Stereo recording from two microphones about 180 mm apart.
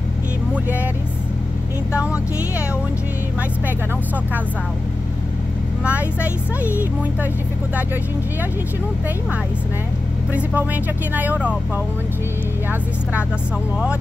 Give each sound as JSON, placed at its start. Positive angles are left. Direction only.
{"t": 5.9, "sound": "speech", "side_deg": -10}
{"t": 10.3, "sound": "speech", "side_deg": -10}